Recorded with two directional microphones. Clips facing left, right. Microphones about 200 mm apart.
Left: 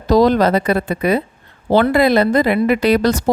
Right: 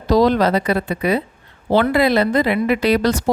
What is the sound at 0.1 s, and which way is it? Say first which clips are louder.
A woman's voice: left 2 dB; 45° left (ahead or behind).